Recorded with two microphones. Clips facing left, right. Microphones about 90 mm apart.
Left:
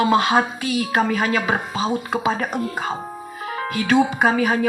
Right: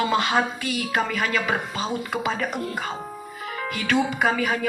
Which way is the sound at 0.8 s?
40° left (ahead or behind).